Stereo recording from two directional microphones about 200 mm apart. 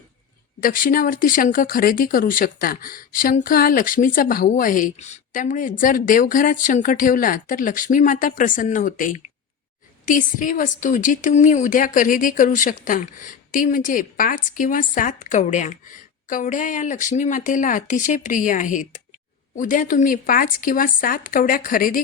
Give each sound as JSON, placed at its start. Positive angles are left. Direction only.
{"t": 0.6, "sound": "a woman's voice", "side_deg": 45}